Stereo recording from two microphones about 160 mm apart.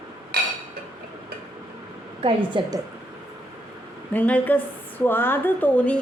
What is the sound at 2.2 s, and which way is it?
Speech, 30° right (ahead or behind).